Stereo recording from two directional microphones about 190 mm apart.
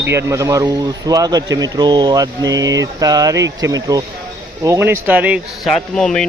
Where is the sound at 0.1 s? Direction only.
15° right (ahead or behind).